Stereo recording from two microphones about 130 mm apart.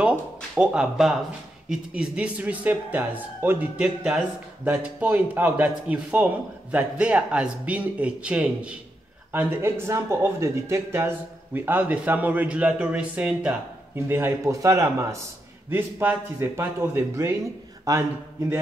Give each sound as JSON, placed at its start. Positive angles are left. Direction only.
{"t": 0.6, "sound": "a man's voice", "side_deg": -5}